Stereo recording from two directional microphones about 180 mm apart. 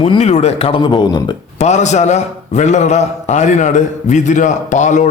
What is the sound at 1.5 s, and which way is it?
A man's voice, 40° left (ahead or behind).